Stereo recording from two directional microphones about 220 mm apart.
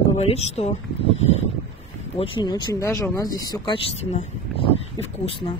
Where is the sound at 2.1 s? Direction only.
25° left (ahead or behind).